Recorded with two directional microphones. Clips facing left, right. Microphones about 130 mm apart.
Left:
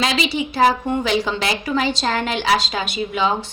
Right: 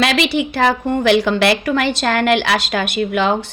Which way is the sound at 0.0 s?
65° right (ahead or behind).